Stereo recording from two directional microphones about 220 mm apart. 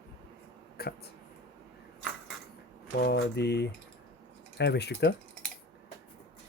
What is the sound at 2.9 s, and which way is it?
Speech, 45° left (ahead or behind).